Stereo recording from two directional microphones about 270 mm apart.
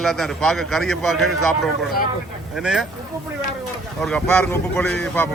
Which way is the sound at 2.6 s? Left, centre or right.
Centre.